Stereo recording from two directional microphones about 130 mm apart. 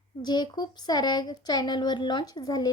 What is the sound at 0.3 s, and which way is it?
A woman's voice, 35° left (ahead or behind).